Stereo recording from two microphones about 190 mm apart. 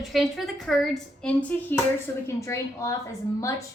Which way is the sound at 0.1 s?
Centre (ahead or behind).